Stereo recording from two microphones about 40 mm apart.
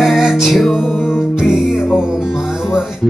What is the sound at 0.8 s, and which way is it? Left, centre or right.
Music, centre.